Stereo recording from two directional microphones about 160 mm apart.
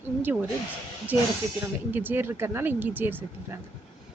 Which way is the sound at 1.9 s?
10° right (ahead or behind).